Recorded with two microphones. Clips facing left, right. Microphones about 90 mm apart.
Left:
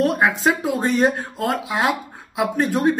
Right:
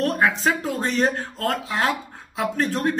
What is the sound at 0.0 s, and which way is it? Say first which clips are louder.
Speech: left 3 dB; 15° left (ahead or behind).